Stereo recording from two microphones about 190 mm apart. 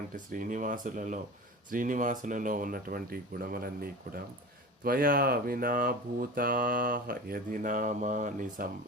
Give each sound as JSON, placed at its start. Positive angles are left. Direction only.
{"t": 0.3, "sound": "speech", "side_deg": -45}